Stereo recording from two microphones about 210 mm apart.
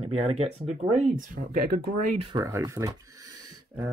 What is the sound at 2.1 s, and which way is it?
Speech, 25° right (ahead or behind).